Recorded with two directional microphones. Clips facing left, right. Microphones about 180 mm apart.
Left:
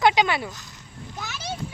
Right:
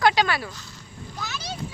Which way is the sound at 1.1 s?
20° left (ahead or behind).